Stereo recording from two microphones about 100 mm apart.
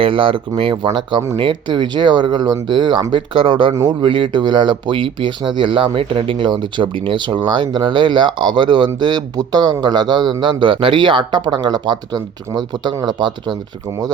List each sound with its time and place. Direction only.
0.0 s speech: 60° right (ahead or behind)